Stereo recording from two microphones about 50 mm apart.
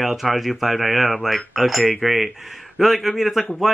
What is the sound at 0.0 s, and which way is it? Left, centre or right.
A man's voice, centre.